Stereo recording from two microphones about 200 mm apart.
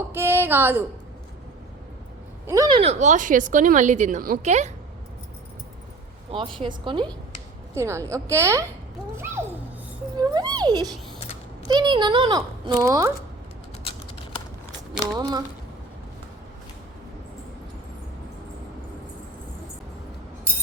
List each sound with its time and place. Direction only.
0.1 s a sound: 10° right (ahead or behind)
2.5 s speech: 20° right (ahead or behind); by 4.7 s 35° right (ahead or behind)
6.6 s speech: 25° right (ahead or behind)
7.7 s a woman's voice: 15° right (ahead or behind)
15.1 s speech: 20° right (ahead or behind)